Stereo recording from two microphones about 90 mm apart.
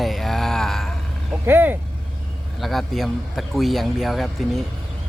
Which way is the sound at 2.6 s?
Centre (ahead or behind).